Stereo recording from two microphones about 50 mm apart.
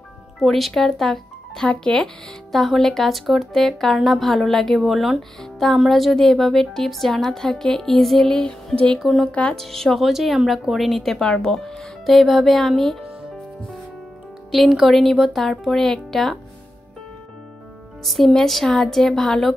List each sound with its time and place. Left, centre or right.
0.4 s speech: centre
2.5 s speech: centre
9.0 s speech: centre
9.3 s speech: left
9.6 s speech: centre
10.0 s speech: centre
11.4 s speech: centre
14.5 s speech: centre
15.6 s speech: centre
18.0 s speech: centre